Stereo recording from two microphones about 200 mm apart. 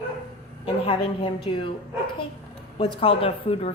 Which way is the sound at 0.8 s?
25° left (ahead or behind).